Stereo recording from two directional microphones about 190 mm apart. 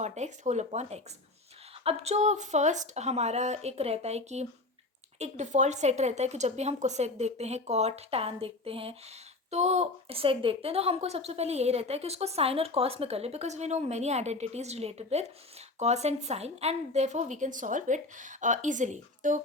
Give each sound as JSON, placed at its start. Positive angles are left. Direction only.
{"t": 0.0, "sound": "a woman's voice", "side_deg": -35}